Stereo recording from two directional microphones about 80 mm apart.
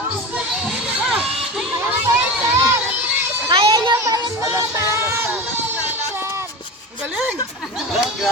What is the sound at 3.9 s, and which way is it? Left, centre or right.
Music, right.